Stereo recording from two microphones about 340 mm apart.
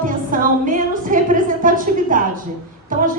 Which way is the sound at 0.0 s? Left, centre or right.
Right.